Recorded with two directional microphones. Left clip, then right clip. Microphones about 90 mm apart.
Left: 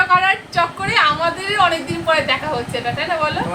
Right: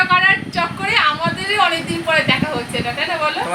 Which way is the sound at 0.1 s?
10° left (ahead or behind).